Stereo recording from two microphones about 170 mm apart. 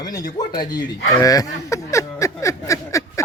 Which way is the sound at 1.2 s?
20° left (ahead or behind).